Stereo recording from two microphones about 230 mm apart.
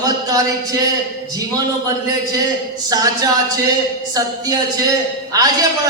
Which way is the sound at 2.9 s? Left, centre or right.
Centre.